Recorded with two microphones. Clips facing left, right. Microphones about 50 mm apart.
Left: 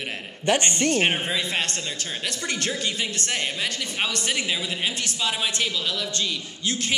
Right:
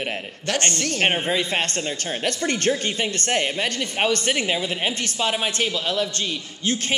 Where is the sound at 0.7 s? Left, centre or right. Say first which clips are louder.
Left 2 dB; centre.